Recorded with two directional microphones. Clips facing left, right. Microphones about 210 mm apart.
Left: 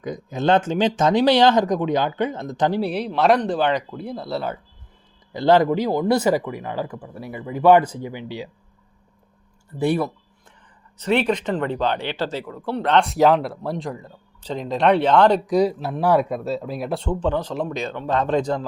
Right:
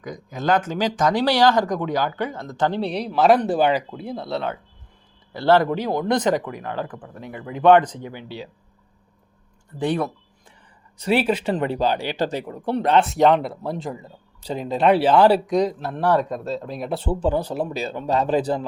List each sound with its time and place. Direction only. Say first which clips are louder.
0.0 s speech: left 4 dB; 25° left (ahead or behind); by 4.5 s centre (ahead or behind)
5.3 s speech: left 1 dB; 15° left (ahead or behind)
9.7 s speech: left 2 dB; 10° left (ahead or behind)
10.9 s speech: even; 10° right (ahead or behind)
15.5 s speech: left 2 dB; 10° left (ahead or behind)